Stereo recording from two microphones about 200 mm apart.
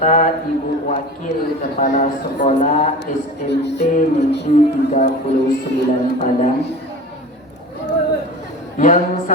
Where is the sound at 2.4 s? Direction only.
35° left (ahead or behind).